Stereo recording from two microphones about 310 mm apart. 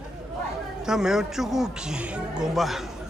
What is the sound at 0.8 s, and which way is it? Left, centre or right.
A man's voice, centre.